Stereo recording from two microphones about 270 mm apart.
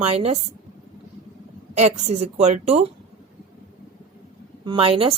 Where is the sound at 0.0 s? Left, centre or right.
Right.